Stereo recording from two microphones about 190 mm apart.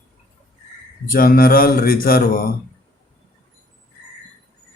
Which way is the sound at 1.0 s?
50° left (ahead or behind).